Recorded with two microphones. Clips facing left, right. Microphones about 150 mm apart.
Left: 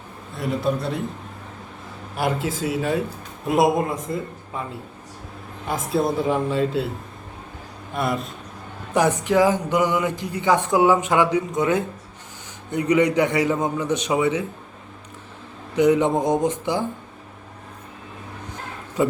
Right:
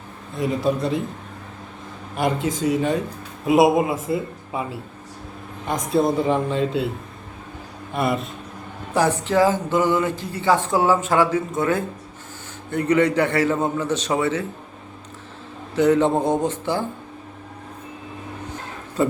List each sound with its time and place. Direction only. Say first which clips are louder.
0.3 s speech: right 2 dB; centre (ahead or behind)
2.1 s speech: right 2 dB; 5° left (ahead or behind)
7.9 s speech: right 2 dB; centre (ahead or behind)
8.9 s speech: left 1 dB; 15° left (ahead or behind)
15.7 s speech: even; 15° left (ahead or behind)
19.0 s speech: even; 10° left (ahead or behind)